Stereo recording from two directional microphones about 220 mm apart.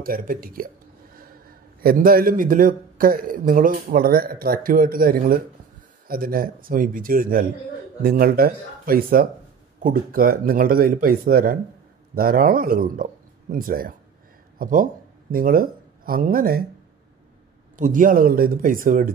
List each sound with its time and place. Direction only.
0.0 s a man's voice: 40° right (ahead or behind)
1.8 s a man's voice: 40° right (ahead or behind)
17.7 s a man's voice: 35° right (ahead or behind)